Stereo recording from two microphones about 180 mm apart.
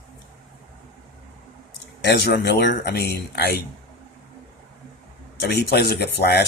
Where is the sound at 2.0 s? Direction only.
65° left (ahead or behind).